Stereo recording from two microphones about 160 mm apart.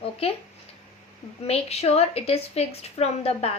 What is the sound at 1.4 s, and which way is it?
A woman's voice, 40° left (ahead or behind).